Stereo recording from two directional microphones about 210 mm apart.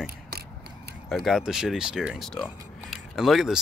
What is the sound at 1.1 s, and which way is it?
Speech, centre (ahead or behind).